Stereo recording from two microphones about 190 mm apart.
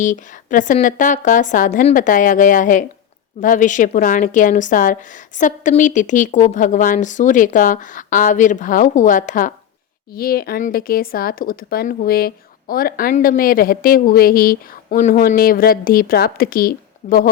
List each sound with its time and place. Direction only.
0.0 s speech: 40° left (ahead or behind)